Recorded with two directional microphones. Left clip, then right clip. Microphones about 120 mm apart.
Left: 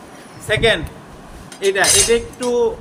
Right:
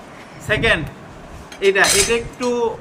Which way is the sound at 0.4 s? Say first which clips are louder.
Left 1 dB; centre (ahead or behind).